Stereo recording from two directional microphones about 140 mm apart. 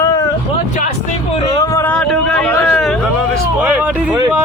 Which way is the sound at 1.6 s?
20° left (ahead or behind).